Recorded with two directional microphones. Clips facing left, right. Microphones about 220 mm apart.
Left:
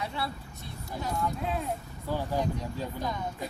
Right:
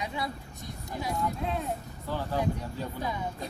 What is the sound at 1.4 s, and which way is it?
Speech, centre (ahead or behind).